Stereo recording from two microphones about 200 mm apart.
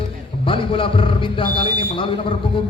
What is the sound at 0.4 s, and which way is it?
Speech, 25° left (ahead or behind).